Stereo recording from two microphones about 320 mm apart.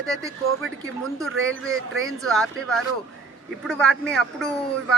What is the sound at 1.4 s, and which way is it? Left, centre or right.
Speech, right.